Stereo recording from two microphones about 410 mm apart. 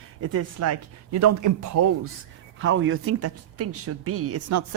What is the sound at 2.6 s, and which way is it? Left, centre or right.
Speech, right.